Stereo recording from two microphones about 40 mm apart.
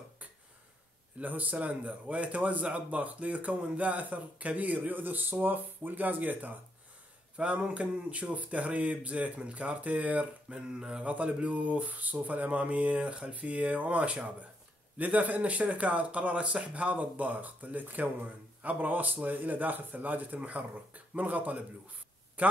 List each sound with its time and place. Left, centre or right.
1.2 s a man's voice: right
7.3 s a man's voice: right
10.5 s a sound: right
11.1 s a man's voice: right